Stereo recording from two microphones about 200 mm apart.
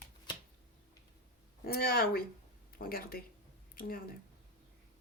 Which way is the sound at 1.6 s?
50° left (ahead or behind).